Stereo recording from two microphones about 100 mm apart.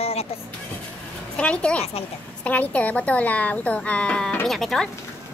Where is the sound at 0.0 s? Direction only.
90° left.